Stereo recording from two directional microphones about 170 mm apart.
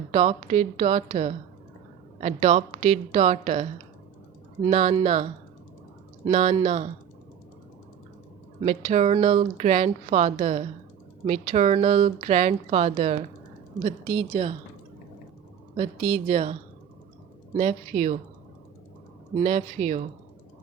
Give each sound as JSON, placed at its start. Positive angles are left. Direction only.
{"t": 0.1, "sound": "speech", "side_deg": -40}
{"t": 8.6, "sound": "speech", "side_deg": -40}
{"t": 15.7, "sound": "speech", "side_deg": -35}
{"t": 19.3, "sound": "speech", "side_deg": -40}